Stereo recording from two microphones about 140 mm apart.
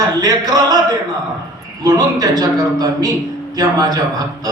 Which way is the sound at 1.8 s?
25° right (ahead or behind).